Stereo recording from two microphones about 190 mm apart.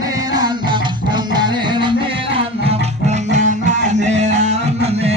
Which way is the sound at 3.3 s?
40° right (ahead or behind).